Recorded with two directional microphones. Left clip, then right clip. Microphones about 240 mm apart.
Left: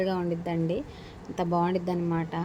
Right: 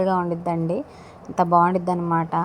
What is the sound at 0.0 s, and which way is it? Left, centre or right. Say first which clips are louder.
A woman's voice: right 7 dB; centre.